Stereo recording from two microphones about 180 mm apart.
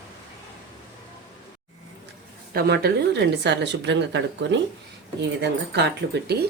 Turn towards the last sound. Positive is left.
turn(degrees=-70)  # may be behind; listen again after turning